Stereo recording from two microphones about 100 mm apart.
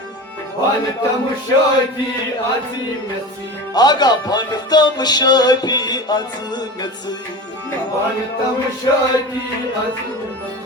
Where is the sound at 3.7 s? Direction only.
45° left (ahead or behind).